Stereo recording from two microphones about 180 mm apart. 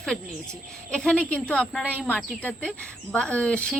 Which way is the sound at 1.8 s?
5° right (ahead or behind).